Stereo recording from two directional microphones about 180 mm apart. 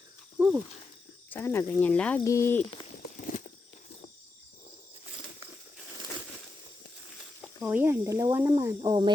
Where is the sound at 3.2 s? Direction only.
45° left (ahead or behind).